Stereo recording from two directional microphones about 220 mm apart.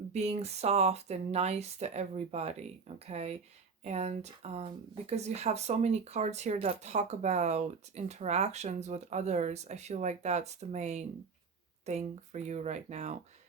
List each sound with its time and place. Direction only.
0.1 s speech: 30° right (ahead or behind)